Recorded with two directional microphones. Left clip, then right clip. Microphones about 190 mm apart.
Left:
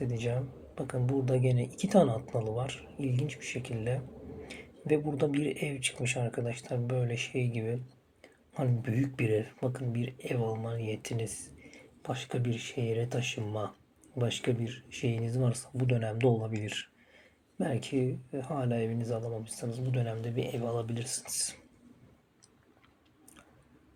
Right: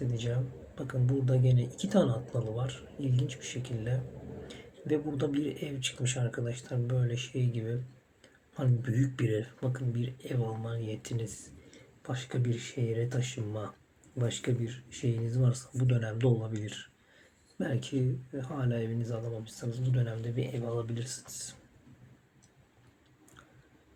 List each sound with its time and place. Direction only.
0.1 s speech: 5° left (ahead or behind)